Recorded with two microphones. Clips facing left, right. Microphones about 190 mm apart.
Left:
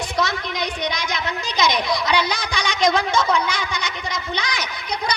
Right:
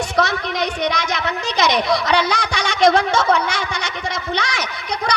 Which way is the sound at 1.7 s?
65° right (ahead or behind).